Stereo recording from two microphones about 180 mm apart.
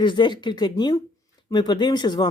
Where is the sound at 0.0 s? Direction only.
25° left (ahead or behind).